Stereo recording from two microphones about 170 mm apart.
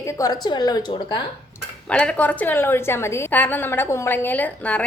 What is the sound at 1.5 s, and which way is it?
Speech, 5° left (ahead or behind).